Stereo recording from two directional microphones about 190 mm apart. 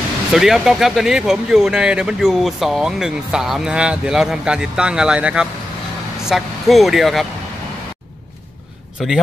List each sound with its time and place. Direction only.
0.3 s speech: centre (ahead or behind)
9.0 s speech: centre (ahead or behind)